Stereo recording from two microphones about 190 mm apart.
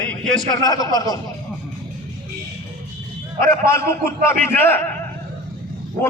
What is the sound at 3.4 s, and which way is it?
A man's voice, 15° left (ahead or behind).